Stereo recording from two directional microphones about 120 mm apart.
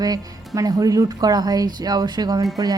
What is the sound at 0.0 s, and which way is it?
Speech, 30° right (ahead or behind).